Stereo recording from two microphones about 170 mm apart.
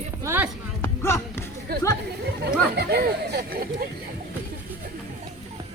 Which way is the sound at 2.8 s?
70° right (ahead or behind).